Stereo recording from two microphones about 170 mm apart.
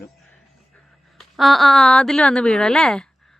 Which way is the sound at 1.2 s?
Centre (ahead or behind).